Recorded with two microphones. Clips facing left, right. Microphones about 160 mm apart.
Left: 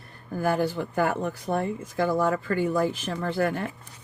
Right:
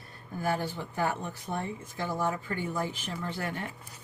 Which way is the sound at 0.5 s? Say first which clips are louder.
Left 7 dB; 85° left.